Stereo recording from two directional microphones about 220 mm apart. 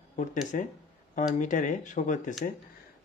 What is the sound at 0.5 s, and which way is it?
Speech, 35° left (ahead or behind).